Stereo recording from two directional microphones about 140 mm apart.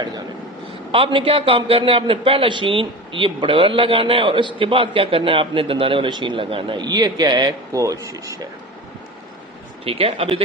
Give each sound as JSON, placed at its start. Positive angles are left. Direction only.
{"t": 0.9, "sound": "a man's voice", "side_deg": -40}
{"t": 9.8, "sound": "speech", "side_deg": -40}